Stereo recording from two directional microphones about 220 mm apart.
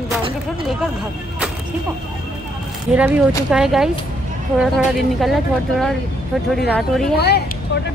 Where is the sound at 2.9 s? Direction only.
5° right (ahead or behind).